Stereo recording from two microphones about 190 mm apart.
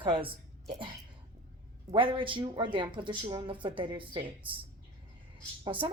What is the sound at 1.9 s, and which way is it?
Speech, 25° right (ahead or behind).